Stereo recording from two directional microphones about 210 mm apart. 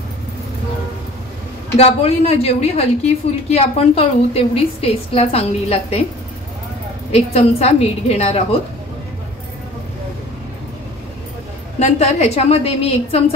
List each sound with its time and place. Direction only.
1.8 s a woman's voice: 30° left (ahead or behind)
7.1 s a woman's voice: 30° left (ahead or behind)
11.8 s a woman's voice: 30° left (ahead or behind)